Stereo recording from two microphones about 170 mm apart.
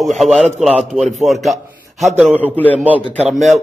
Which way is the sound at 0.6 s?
Centre (ahead or behind).